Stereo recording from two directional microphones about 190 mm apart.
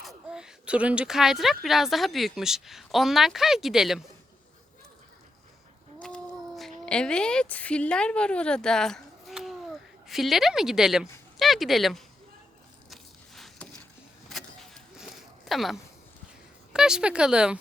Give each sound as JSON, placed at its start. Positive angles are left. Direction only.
{"t": 0.0, "sound": "a woman's voice", "side_deg": 0}
{"t": 6.6, "sound": "a woman's voice", "side_deg": 5}
{"t": 12.9, "sound": "a sound", "side_deg": 0}
{"t": 16.7, "sound": "a woman's voice", "side_deg": -5}